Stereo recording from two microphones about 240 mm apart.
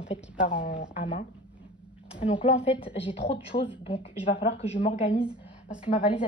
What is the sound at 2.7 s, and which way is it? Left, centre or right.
A woman's voice, left.